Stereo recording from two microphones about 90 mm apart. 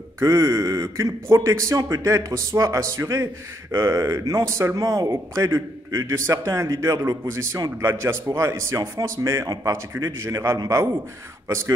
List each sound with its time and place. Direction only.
0.2 s speech: 40° right (ahead or behind)